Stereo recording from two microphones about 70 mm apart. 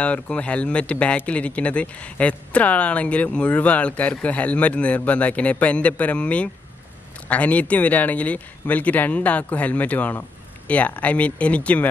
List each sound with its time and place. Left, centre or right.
0.0 s speech: centre